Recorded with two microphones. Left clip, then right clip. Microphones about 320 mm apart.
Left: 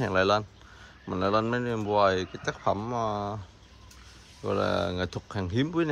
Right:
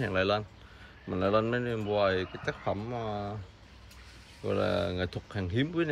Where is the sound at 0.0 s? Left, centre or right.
Centre.